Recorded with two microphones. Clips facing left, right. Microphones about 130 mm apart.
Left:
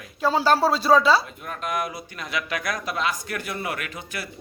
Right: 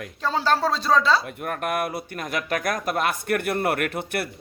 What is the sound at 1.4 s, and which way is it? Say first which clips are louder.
Speech: right 3 dB; 60° right (ahead or behind).